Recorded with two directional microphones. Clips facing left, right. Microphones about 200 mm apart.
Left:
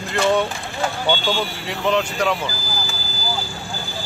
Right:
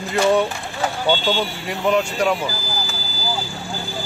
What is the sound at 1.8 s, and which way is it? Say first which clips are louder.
Speech: right 1 dB; 10° right (ahead or behind).